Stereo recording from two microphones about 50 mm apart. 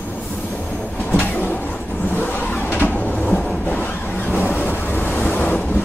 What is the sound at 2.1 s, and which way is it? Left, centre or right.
Vehicle, left.